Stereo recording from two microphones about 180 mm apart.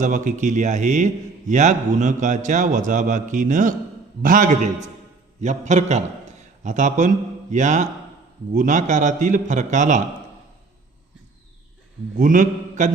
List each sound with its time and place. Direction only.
0.0 s a man's voice: 45° right (ahead or behind)
12.1 s a man's voice: 45° right (ahead or behind)